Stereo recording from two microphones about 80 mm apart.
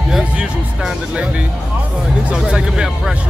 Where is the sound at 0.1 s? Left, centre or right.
Centre.